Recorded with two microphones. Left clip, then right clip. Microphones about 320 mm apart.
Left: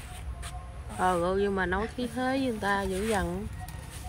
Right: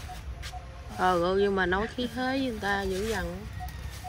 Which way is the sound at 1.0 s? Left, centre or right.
Centre.